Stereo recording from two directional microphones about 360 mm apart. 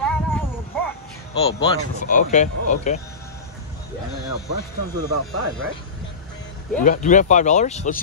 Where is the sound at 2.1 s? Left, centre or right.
Left.